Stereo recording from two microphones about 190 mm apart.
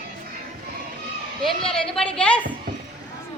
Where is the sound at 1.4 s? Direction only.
Centre (ahead or behind).